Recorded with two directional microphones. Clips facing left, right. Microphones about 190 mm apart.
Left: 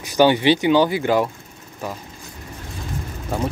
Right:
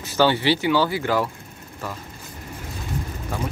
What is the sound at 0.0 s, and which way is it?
Speech, 15° left (ahead or behind).